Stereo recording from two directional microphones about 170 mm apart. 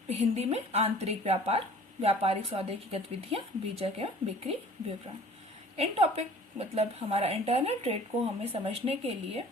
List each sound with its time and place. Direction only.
0.1 s speech: 40° right (ahead or behind)